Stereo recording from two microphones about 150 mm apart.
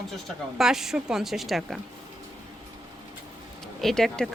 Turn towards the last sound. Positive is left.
turn(degrees=5)  # may be behind; listen again after turning